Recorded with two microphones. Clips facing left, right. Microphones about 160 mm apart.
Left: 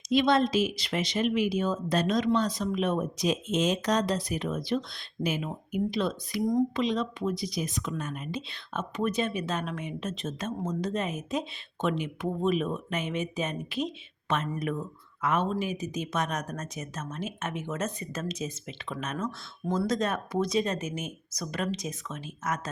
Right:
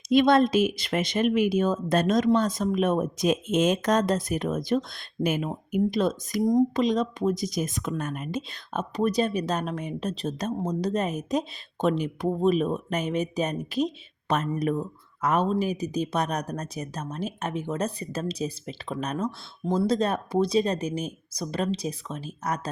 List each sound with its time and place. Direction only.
0.1 s speech: 50° right (ahead or behind); by 22.7 s 35° right (ahead or behind)